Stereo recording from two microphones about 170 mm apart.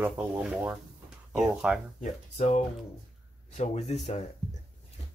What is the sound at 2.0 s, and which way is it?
Speech, 40° left (ahead or behind).